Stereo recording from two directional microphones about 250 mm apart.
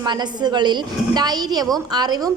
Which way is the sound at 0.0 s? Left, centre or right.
Centre.